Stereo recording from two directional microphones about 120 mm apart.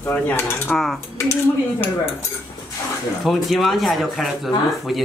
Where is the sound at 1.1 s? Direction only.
20° left (ahead or behind).